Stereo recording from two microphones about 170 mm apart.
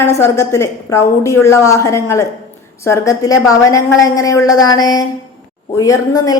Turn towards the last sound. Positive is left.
turn(degrees=20)  # may be behind; listen again after turning